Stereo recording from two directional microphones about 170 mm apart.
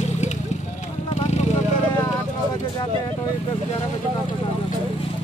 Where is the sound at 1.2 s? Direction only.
40° left (ahead or behind).